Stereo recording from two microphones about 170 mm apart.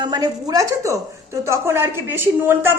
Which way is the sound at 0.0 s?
25° right (ahead or behind).